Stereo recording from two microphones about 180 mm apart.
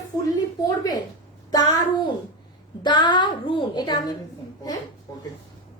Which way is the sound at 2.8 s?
25° left (ahead or behind).